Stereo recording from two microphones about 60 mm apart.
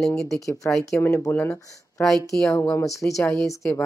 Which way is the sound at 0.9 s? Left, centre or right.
Left.